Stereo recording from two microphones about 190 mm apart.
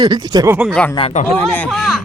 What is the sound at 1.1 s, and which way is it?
Speech, 40° left (ahead or behind).